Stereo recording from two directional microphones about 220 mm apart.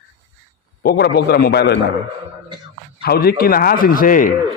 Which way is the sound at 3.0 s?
45° left (ahead or behind).